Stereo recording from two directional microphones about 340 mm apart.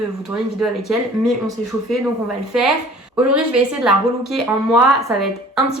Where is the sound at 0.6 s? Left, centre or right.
Centre.